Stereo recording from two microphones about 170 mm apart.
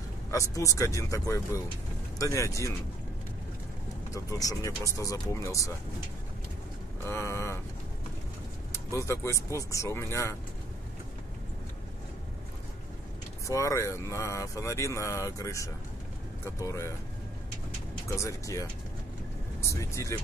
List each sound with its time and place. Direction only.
0.3 s speech: 20° left (ahead or behind)
4.1 s speech: 20° left (ahead or behind)
7.1 s a sound: 15° left (ahead or behind)
8.7 s speech: 15° left (ahead or behind)
13.5 s speech: 20° left (ahead or behind)
18.0 s speech: 20° left (ahead or behind)
19.7 s speech: 20° left (ahead or behind)